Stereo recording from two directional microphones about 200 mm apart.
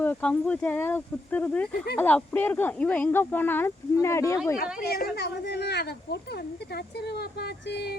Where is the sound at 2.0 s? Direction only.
10° left (ahead or behind).